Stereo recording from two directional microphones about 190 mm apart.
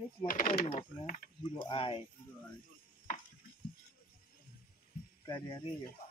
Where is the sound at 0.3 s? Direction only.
45° left (ahead or behind).